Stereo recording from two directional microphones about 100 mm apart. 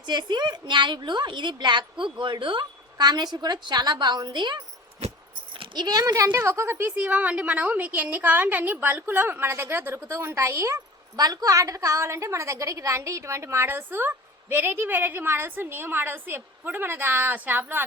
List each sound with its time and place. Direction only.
0.0 s a woman's voice: 45° right (ahead or behind)
5.7 s a woman's voice: 40° right (ahead or behind); by 6.9 s 25° right (ahead or behind)
6.9 s a woman's voice: 15° right (ahead or behind)
11.2 s a woman's voice: 40° right (ahead or behind); by 17.8 s 20° right (ahead or behind)